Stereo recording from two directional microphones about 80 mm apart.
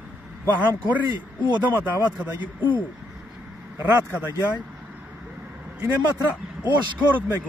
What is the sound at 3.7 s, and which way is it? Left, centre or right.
Speech, right.